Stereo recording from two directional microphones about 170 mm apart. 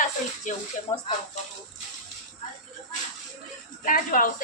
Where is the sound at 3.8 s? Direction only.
50° left (ahead or behind).